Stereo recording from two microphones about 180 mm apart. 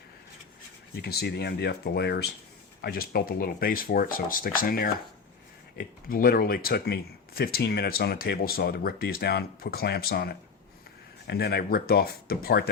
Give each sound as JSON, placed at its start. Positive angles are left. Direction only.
{"t": 0.9, "sound": "speech", "side_deg": 60}